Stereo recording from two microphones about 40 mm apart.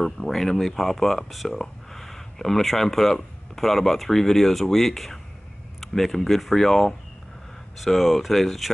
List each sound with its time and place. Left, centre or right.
0.0 s speech: centre
7.7 s speech: centre